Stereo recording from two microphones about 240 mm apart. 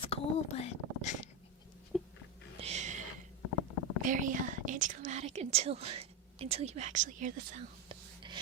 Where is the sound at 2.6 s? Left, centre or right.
Right.